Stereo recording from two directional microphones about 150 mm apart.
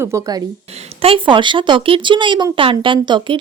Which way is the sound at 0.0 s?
20° right (ahead or behind).